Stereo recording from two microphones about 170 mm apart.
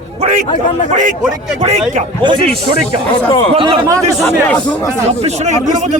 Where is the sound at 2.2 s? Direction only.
30° right (ahead or behind).